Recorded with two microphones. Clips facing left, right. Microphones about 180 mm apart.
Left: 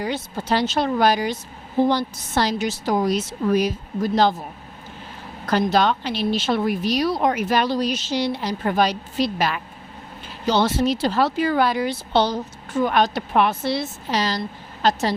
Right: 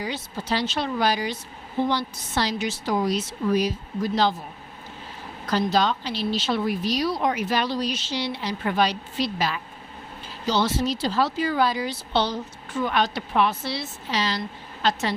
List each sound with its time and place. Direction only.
0.0 s speech: 50° left (ahead or behind)
5.5 s speech: 60° left (ahead or behind); by 15.1 s 40° left (ahead or behind)